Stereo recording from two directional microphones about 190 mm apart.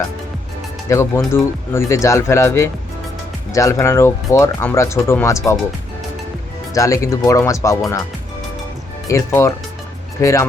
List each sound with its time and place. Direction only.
0.9 s speech: 15° left (ahead or behind)
6.7 s speech: 15° left (ahead or behind)
9.0 s speech: 15° left (ahead or behind)